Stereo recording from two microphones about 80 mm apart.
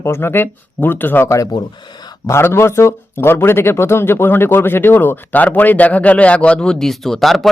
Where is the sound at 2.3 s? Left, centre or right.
Left; by 7.5 s centre.